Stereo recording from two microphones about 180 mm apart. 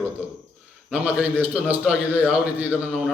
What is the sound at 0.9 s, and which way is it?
A man's voice, 5° right (ahead or behind).